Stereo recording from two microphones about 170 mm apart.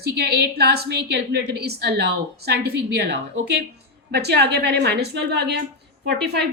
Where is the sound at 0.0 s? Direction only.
70° right (ahead or behind).